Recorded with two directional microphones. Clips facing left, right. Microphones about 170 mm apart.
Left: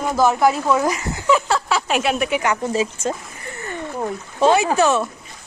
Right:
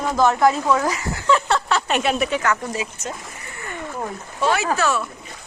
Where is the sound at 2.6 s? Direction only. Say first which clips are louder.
Left 7 dB; 30° left (ahead or behind).